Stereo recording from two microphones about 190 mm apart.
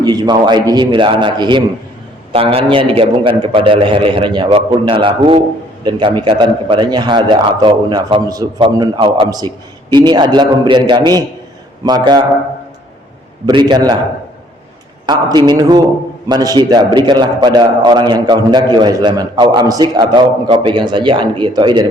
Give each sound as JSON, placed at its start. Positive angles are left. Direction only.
{"t": 0.0, "sound": "a man's voice", "side_deg": -20}
{"t": 13.5, "sound": "a man's voice", "side_deg": -25}
{"t": 15.0, "sound": "a man's voice", "side_deg": -25}